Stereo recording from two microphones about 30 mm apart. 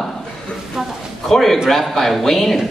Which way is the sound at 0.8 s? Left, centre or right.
Centre.